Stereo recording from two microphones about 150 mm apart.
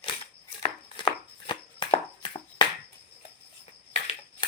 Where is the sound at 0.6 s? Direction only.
35° left (ahead or behind).